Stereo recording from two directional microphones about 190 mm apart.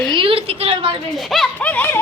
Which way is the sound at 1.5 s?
10° left (ahead or behind).